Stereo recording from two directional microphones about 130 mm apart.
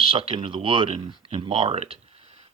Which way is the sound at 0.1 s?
45° right (ahead or behind).